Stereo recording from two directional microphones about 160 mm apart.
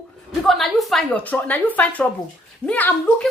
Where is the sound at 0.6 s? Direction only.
Centre (ahead or behind).